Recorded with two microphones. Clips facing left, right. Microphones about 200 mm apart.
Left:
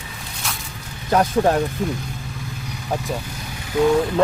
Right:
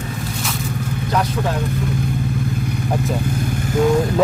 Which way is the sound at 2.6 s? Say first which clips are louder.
Right 5 dB; 55° right (ahead or behind).